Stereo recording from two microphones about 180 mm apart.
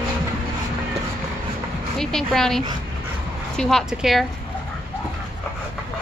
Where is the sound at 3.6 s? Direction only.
Centre (ahead or behind).